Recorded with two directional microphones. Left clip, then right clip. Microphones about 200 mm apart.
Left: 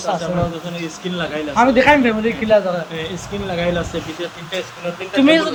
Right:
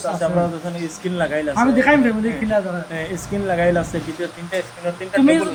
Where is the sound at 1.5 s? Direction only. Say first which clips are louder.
Left 5 dB; 15° left (ahead or behind).